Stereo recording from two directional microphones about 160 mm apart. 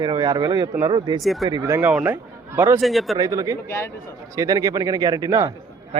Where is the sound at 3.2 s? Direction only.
20° right (ahead or behind).